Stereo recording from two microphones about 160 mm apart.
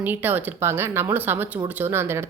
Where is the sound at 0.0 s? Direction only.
10° right (ahead or behind).